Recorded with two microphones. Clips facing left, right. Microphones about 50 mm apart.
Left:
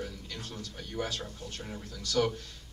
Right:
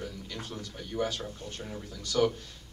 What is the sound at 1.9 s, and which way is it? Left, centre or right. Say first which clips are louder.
Speech: right 1 dB; right.